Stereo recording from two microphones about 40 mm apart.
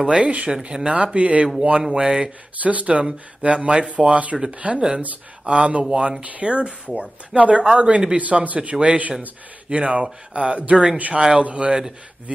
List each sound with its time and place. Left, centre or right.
0.0 s speech: centre
0.3 s speech: right
2.5 s speech: right
8.2 s speech: right